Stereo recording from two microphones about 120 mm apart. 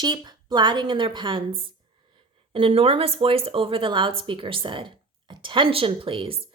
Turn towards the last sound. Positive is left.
turn(degrees=-50)  # may be behind; listen again after turning